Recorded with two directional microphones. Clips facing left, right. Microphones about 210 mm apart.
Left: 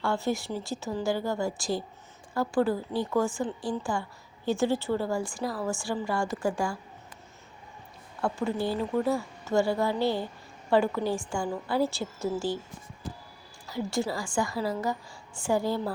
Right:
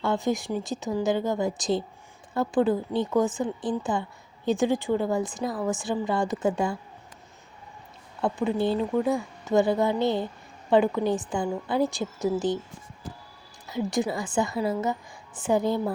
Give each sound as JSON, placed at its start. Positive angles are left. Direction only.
{"t": 0.0, "sound": "a woman's voice", "side_deg": -20}
{"t": 8.2, "sound": "a woman's voice", "side_deg": -20}
{"t": 13.7, "sound": "a woman's voice", "side_deg": -20}